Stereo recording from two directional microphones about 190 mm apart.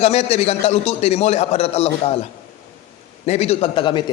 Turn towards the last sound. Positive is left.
turn(degrees=25)  # may be behind; listen again after turning